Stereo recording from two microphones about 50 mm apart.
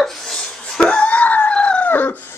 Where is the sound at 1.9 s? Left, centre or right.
Left.